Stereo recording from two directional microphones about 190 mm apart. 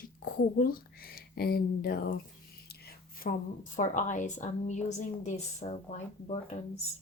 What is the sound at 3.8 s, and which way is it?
A woman's voice, 40° left (ahead or behind).